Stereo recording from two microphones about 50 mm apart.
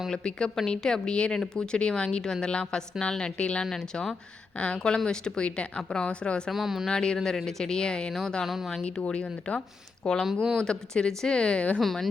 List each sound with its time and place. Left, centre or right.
0.1 s a woman's voice: centre
4.5 s speech: left
6.5 s speech: centre
6.8 s a woman's voice: centre
8.4 s speech: centre
8.7 s a woman's voice: centre
11.8 s speech: centre